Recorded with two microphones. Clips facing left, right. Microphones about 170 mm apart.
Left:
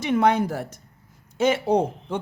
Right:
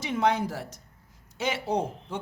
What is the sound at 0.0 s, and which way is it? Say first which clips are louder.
Speech: left 6 dB; 55° left (ahead or behind).